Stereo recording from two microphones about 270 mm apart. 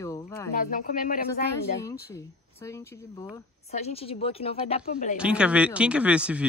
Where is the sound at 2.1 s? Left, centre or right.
Centre.